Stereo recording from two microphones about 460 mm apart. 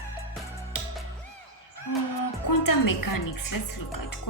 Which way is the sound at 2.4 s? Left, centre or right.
Left.